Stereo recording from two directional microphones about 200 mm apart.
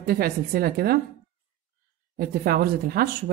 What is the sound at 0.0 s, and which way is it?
Speech, 50° right (ahead or behind).